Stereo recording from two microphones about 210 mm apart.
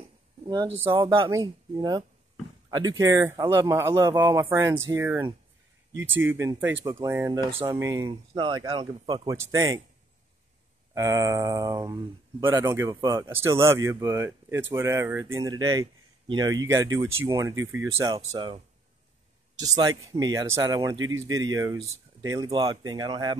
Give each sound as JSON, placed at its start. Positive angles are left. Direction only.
{"t": 0.8, "sound": "speech", "side_deg": -10}
{"t": 11.0, "sound": "speech", "side_deg": -15}
{"t": 18.1, "sound": "speech", "side_deg": -25}
{"t": 19.6, "sound": "speech", "side_deg": -15}